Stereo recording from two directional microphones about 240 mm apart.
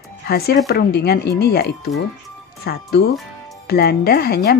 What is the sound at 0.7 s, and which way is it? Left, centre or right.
Speech, left.